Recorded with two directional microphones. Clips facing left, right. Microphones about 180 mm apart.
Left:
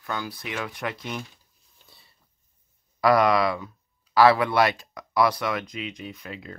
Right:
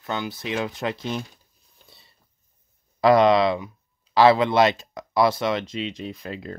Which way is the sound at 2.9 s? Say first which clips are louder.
Right 4 dB; 25° right (ahead or behind).